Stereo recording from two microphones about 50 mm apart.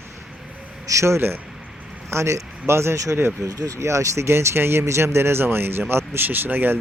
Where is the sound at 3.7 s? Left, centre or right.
Right.